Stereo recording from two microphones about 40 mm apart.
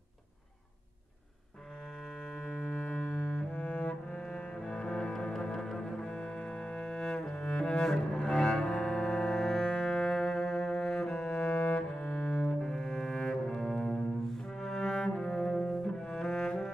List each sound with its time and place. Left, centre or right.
2.3 s music: left
3.5 s cello: left
5.9 s cello: left
12.0 s double bass: left
12.5 s cello: centre